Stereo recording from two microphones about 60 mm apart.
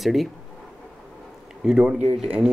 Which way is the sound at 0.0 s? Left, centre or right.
Centre.